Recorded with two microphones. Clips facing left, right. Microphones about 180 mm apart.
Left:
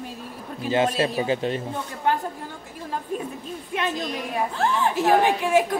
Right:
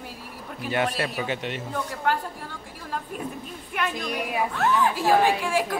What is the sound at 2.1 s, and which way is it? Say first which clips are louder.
Speech: left 2 dB; 20° left (ahead or behind).